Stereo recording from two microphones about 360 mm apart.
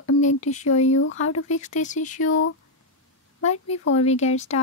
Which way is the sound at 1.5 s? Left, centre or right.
Centre.